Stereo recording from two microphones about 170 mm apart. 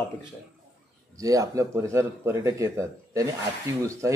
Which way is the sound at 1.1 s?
20° right (ahead or behind).